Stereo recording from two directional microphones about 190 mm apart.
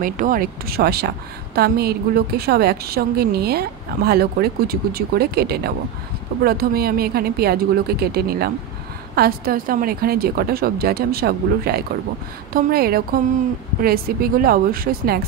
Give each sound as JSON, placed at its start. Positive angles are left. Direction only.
{"t": 0.0, "sound": "a woman's voice", "side_deg": -45}